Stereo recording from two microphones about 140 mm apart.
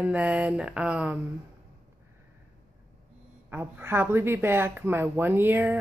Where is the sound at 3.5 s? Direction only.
15° right (ahead or behind).